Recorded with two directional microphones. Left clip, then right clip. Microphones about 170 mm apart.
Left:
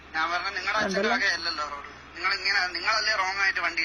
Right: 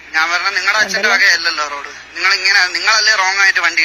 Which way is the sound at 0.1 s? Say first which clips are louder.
Right 13 dB; 20° right (ahead or behind).